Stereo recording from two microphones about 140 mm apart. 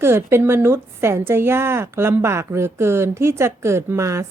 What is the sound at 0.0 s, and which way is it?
A woman's voice, 15° right (ahead or behind).